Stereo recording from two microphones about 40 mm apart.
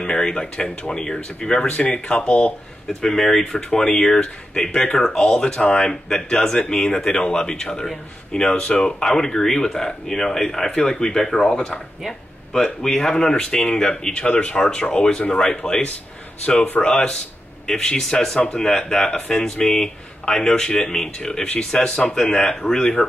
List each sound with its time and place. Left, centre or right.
0.0 s speech: left
3.0 s speech: centre
4.9 s speech: centre
10.7 s speech: left
16.8 s speech: centre